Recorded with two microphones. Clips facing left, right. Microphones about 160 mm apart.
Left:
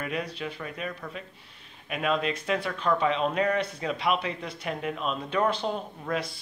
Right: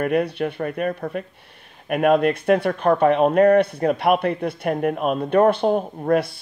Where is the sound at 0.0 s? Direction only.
60° right (ahead or behind).